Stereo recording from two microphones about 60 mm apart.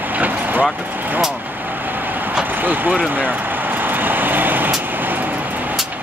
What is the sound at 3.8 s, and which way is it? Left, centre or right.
Vehicle, right.